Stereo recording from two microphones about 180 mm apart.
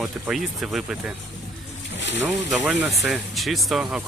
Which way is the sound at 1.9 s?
85° left.